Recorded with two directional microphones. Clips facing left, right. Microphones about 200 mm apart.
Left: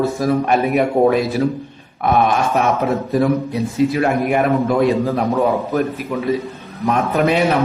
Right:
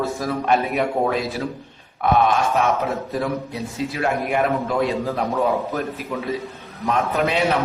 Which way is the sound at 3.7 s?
55° left (ahead or behind).